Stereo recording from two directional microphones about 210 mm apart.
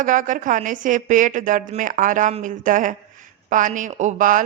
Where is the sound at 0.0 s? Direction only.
40° right (ahead or behind).